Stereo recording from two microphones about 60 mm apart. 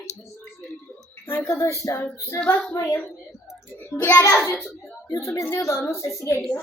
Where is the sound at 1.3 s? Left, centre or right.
Left.